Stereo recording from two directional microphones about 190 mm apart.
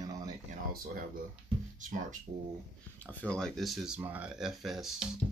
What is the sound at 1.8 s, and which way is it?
Speech, 40° right (ahead or behind).